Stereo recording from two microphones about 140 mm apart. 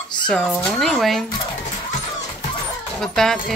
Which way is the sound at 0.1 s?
5° left (ahead or behind).